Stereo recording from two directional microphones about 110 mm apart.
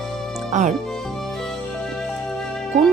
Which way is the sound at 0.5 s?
90° right.